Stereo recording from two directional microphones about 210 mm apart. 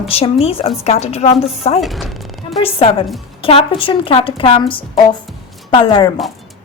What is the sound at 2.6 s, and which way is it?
A woman's voice, 25° left (ahead or behind).